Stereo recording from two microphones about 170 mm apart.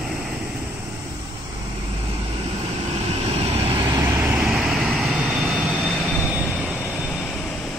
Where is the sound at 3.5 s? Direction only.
35° right (ahead or behind).